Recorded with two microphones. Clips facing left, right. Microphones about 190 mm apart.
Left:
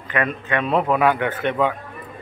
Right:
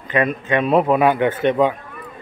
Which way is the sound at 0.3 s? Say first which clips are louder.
Right 4 dB; 15° right (ahead or behind).